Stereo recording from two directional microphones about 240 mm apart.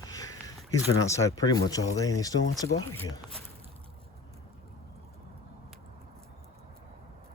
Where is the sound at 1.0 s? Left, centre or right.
Centre.